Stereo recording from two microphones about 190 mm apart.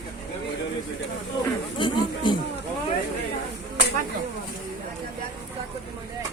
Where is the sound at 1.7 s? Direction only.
25° left (ahead or behind).